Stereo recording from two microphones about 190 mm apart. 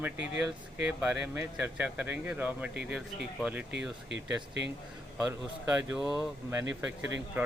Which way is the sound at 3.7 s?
65° right (ahead or behind).